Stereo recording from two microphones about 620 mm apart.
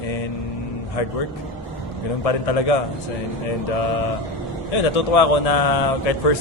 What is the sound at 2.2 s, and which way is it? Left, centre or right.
Speech, left.